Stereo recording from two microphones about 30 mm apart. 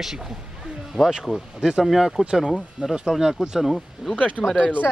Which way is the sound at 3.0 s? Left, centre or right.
Centre.